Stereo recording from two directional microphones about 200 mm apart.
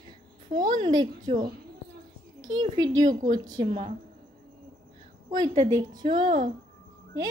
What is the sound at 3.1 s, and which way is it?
Speech, 40° right (ahead or behind).